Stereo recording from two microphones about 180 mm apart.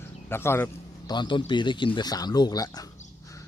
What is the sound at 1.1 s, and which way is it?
A man's voice, 25° left (ahead or behind).